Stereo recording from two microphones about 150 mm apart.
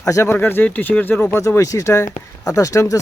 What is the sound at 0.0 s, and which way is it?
Speech, 20° left (ahead or behind).